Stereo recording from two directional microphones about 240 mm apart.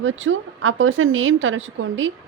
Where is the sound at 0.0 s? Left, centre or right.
Right.